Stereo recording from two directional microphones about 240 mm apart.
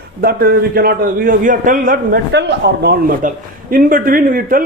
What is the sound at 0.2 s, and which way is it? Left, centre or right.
A man's voice, right.